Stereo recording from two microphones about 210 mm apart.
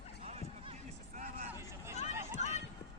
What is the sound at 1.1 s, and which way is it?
Vehicle, 35° right (ahead or behind).